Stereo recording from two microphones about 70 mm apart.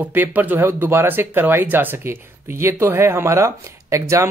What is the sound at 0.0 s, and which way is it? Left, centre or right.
Speech, right.